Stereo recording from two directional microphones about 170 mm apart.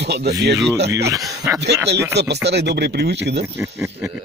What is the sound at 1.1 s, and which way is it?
Speech, 20° right (ahead or behind).